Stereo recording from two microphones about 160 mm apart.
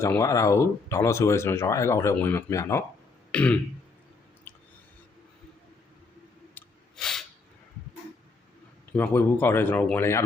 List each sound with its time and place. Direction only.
0.0 s speech: 20° left (ahead or behind)
6.5 s a sound: 5° left (ahead or behind)
8.9 s speech: 10° left (ahead or behind)